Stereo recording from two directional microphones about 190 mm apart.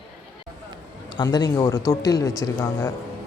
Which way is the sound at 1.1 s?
20° left (ahead or behind).